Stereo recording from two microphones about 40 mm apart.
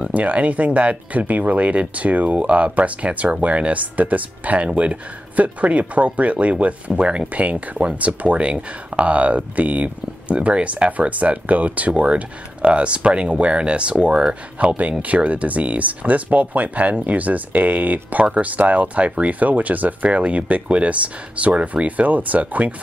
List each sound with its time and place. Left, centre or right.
0.1 s speech: right
4.6 s speech: right
5.3 s speech: right
7.3 s speech: right